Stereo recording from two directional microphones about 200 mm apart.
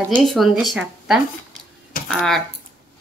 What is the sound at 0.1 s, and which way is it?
Speech, centre (ahead or behind).